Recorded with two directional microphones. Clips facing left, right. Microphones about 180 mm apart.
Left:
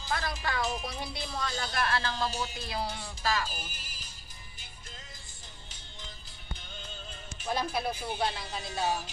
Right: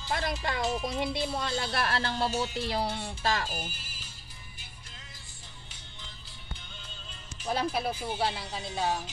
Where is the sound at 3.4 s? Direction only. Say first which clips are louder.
Right 2 dB; 40° right (ahead or behind).